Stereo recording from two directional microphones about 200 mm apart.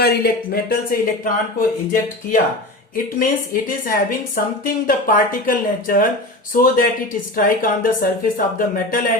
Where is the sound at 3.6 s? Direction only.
45° left (ahead or behind).